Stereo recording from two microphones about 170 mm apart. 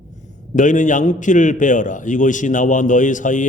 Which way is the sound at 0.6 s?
50° left (ahead or behind).